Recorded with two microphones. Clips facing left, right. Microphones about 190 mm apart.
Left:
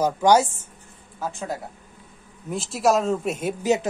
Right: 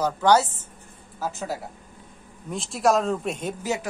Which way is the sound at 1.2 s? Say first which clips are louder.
Even; 5° right (ahead or behind).